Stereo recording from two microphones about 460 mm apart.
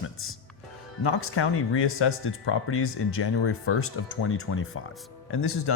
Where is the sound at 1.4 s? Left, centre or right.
Left.